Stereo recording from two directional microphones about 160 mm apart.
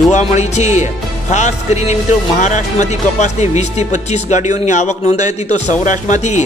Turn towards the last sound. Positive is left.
turn(degrees=50)  # may be behind; listen again after turning